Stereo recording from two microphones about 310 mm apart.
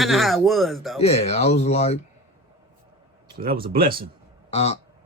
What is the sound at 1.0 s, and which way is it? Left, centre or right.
Speech, centre.